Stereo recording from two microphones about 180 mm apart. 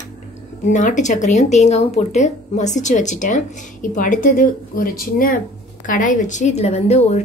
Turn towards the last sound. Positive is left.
turn(degrees=35)  # may be behind; listen again after turning